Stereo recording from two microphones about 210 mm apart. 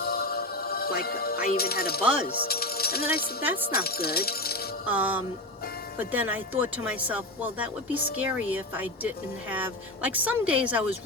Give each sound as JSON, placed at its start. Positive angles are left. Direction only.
{"t": 0.0, "sound": "speech", "side_deg": 45}
{"t": 4.9, "sound": "speech", "side_deg": -10}